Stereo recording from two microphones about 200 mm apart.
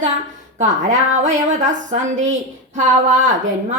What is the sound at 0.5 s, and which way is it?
A woman's voice, 35° right (ahead or behind).